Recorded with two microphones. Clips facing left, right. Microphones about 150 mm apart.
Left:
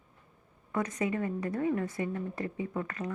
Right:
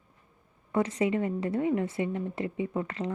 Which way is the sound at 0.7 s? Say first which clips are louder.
Right 5 dB; 30° right (ahead or behind).